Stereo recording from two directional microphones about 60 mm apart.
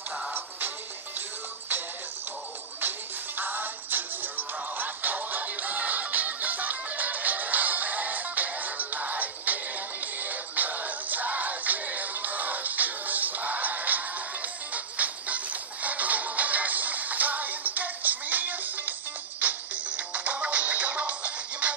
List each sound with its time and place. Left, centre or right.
3.3 s music: right